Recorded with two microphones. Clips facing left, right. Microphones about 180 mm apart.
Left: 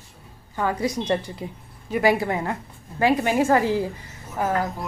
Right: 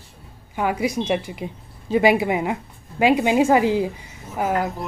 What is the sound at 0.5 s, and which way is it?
A woman's voice, 15° right (ahead or behind).